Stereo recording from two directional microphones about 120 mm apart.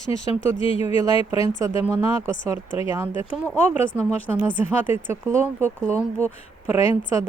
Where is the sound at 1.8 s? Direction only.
20° right (ahead or behind).